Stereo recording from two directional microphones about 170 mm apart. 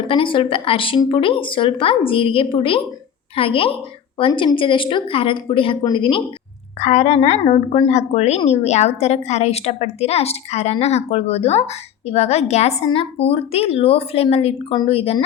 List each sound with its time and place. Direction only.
0.1 s a woman's voice: 30° left (ahead or behind)
6.7 s a woman's voice: 40° left (ahead or behind)